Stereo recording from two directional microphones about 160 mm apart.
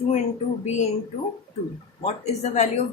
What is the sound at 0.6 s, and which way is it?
Speech, 45° left (ahead or behind).